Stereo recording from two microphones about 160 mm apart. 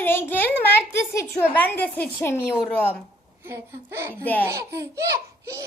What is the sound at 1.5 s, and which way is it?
A woman's voice, 15° left (ahead or behind).